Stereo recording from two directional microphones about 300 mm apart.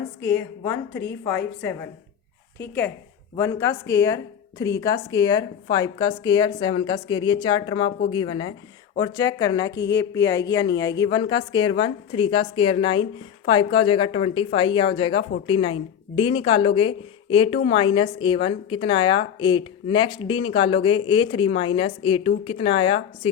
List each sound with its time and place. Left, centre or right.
0.2 s speech: centre